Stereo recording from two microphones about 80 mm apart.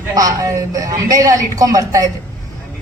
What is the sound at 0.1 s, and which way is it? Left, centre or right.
A woman's voice, right.